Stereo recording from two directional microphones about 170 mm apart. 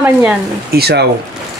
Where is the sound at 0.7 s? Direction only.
70° right (ahead or behind).